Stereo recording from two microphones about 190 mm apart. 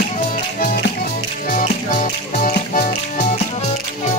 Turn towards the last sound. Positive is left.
turn(degrees=40)  # may be behind; listen again after turning